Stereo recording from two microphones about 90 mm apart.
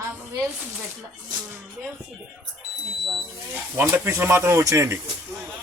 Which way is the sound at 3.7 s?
25° right (ahead or behind).